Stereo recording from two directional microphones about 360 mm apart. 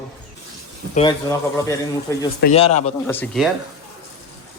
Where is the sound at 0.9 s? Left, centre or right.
Centre.